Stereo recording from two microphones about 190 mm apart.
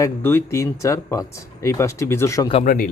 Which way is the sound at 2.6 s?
45° left (ahead or behind).